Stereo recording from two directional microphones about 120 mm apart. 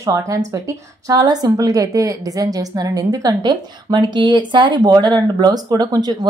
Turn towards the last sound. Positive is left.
turn(degrees=-35)  # may be behind; listen again after turning